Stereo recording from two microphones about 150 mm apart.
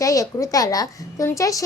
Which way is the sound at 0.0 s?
20° left (ahead or behind).